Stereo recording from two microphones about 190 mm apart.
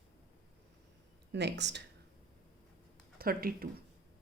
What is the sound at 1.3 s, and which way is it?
Speech, 65° right (ahead or behind).